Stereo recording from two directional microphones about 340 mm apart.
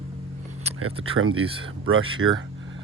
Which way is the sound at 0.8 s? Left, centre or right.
Right.